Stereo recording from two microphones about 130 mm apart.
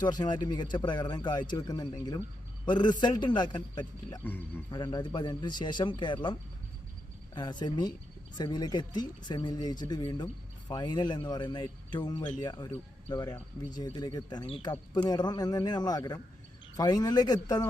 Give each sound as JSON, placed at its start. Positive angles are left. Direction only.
{"t": 0.0, "sound": "a man's voice", "side_deg": 35}
{"t": 4.2, "sound": "speech", "side_deg": 15}
{"t": 4.7, "sound": "a man's voice", "side_deg": 30}